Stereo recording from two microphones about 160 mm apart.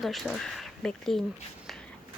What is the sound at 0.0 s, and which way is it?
Speech, centre (ahead or behind).